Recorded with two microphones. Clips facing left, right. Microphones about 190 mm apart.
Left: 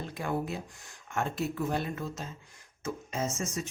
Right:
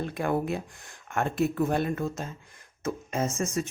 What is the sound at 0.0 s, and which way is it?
Speech, 60° right (ahead or behind).